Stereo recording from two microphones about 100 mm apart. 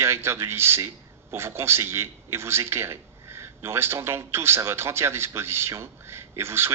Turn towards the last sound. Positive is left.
turn(degrees=-25)  # may be behind; listen again after turning